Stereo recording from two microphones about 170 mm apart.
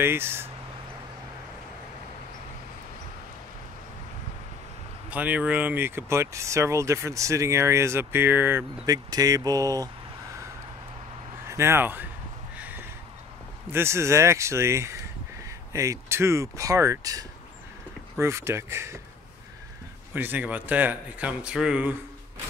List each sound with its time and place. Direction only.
0.0 s speech: 15° right (ahead or behind)
5.1 s speech: 10° right (ahead or behind)
11.4 s speech: 15° right (ahead or behind)
12.5 s a sound: 10° right (ahead or behind)
13.7 s speech: 15° right (ahead or behind)
20.2 s speech: 10° right (ahead or behind)